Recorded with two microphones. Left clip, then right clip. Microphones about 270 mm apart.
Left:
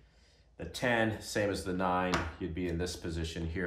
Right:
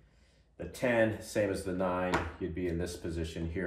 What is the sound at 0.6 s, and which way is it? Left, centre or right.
Speech, centre.